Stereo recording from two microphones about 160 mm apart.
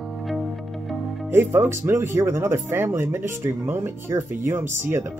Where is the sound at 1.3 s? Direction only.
15° right (ahead or behind).